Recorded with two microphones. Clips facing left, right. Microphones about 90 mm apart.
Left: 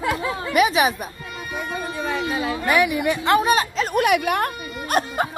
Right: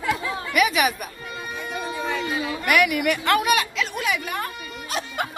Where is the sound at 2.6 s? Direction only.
20° left (ahead or behind).